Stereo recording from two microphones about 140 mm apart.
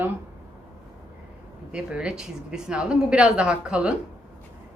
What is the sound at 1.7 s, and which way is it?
A woman's voice, 5° right (ahead or behind).